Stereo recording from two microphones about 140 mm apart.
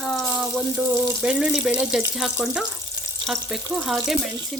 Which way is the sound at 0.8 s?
20° right (ahead or behind).